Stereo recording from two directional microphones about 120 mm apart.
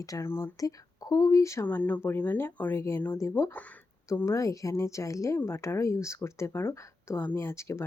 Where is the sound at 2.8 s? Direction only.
20° left (ahead or behind).